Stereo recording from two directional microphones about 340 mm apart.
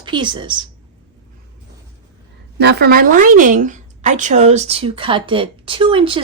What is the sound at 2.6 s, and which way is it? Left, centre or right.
A woman's voice, right.